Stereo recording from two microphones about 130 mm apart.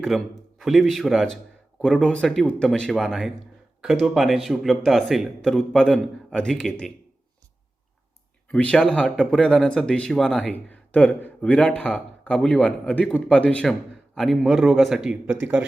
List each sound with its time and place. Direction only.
0.0 s speech: centre (ahead or behind)
8.5 s speech: 5° left (ahead or behind)
15.3 s speech: 15° right (ahead or behind)